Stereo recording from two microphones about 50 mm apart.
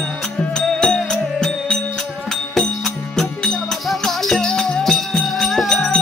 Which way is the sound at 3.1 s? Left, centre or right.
Centre.